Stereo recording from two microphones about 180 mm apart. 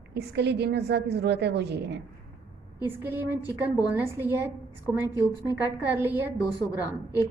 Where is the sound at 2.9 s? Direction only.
10° right (ahead or behind).